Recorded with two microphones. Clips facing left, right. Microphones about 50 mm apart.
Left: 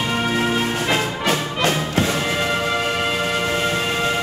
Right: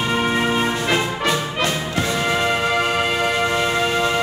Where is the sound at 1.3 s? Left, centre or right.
Left.